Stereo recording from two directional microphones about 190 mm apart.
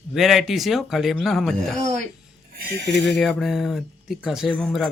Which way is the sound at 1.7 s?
40° right (ahead or behind).